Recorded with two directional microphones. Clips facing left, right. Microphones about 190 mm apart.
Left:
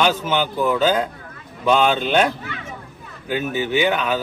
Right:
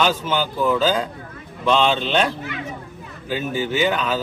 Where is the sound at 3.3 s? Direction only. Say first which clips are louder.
Left 2 dB; 10° left (ahead or behind).